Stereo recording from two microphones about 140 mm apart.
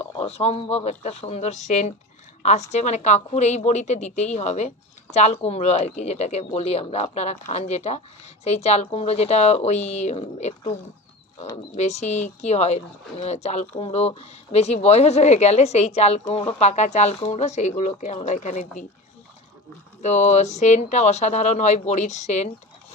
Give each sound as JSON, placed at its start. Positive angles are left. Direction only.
{"t": 0.0, "sound": "a woman's voice", "side_deg": 45}
{"t": 11.7, "sound": "speech", "side_deg": 55}
{"t": 20.0, "sound": "speech", "side_deg": 55}